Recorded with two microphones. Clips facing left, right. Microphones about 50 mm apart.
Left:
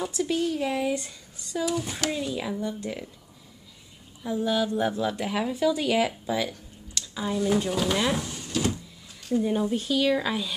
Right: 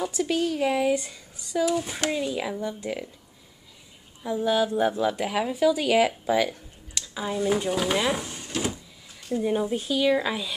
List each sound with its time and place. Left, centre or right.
0.5 s a woman's voice: centre
4.2 s a woman's voice: centre
6.2 s a sound: right
7.2 s a woman's voice: centre